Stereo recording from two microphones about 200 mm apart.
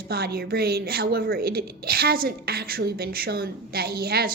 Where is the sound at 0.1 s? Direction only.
50° right (ahead or behind).